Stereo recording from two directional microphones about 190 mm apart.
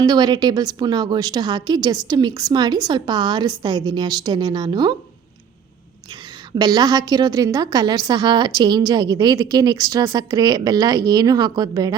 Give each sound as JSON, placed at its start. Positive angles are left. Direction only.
{"t": 0.0, "sound": "a woman's voice", "side_deg": -20}
{"t": 6.6, "sound": "a woman's voice", "side_deg": -20}